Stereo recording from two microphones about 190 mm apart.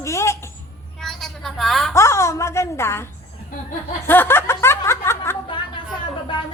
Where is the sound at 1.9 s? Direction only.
15° left (ahead or behind).